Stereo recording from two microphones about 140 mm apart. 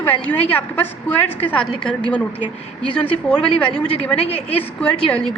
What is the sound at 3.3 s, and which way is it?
A woman's voice, 5° left (ahead or behind).